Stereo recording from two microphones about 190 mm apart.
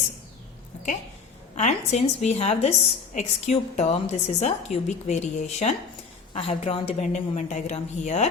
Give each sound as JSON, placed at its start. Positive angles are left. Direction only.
{"t": 1.5, "sound": "a woman's voice", "side_deg": 35}